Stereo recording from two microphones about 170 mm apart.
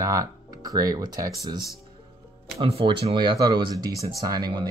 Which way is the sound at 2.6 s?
35° right (ahead or behind).